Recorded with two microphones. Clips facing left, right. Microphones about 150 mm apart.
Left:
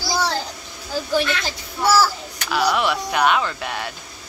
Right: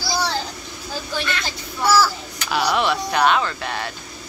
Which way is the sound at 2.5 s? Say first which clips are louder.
Even; 5° left (ahead or behind).